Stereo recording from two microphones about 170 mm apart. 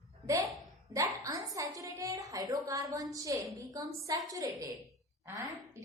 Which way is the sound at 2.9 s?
20° right (ahead or behind).